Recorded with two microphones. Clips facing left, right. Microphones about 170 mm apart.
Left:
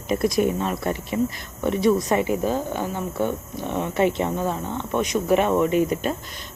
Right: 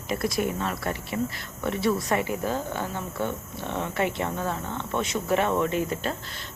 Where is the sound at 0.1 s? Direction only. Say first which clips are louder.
Left 6 dB; 20° left (ahead or behind).